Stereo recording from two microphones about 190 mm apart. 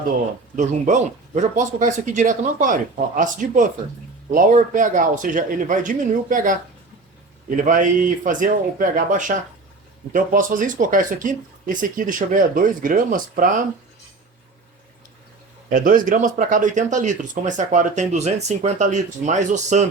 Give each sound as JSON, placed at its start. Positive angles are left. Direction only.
{"t": 0.5, "sound": "speech", "side_deg": -40}
{"t": 15.7, "sound": "speech", "side_deg": -45}